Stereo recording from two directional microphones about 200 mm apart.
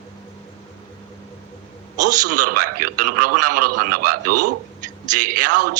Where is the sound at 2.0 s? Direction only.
40° right (ahead or behind).